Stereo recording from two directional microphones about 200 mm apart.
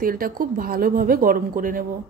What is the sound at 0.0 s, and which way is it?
A woman's voice, 45° right (ahead or behind).